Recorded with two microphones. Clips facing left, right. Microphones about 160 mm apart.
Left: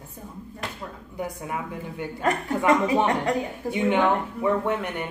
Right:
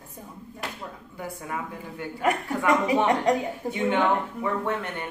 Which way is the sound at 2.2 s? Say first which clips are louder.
Left 2 dB; 10° right (ahead or behind).